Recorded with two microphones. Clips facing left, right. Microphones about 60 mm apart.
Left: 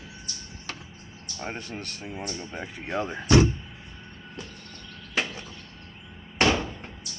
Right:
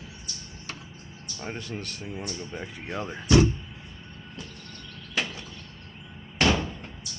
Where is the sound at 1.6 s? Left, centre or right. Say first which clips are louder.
Right 1 dB; left.